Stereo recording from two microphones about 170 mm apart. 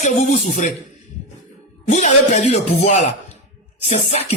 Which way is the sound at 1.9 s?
45° left (ahead or behind).